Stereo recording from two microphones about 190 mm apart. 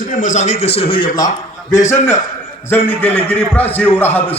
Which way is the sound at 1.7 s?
15° left (ahead or behind).